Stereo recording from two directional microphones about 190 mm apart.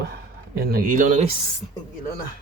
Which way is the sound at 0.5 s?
50° right (ahead or behind).